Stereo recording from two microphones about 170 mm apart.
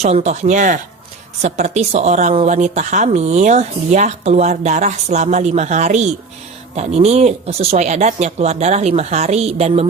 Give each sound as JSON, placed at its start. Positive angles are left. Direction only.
{"t": 0.0, "sound": "a woman's voice", "side_deg": -40}